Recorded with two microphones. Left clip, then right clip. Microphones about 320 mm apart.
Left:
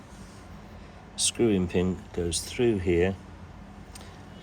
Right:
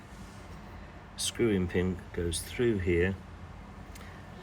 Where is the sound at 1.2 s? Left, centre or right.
Centre.